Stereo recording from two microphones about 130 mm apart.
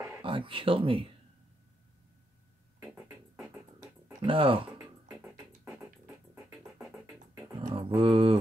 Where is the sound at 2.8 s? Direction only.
5° right (ahead or behind).